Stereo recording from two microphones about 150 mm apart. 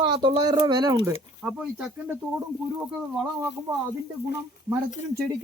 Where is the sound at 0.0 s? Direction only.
30° right (ahead or behind).